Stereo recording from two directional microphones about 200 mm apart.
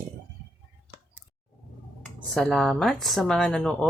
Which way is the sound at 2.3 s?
5° left (ahead or behind).